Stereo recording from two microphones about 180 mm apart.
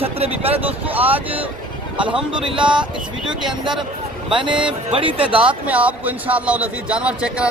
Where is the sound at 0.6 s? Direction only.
10° right (ahead or behind).